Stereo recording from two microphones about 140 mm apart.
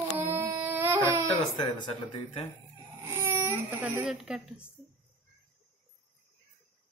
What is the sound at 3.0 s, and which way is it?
Speech, 20° right (ahead or behind).